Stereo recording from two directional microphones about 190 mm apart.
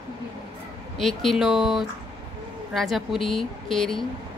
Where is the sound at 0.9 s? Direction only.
Centre (ahead or behind).